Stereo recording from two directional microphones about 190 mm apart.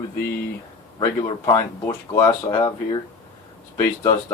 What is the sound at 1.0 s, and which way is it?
Speech, 15° left (ahead or behind).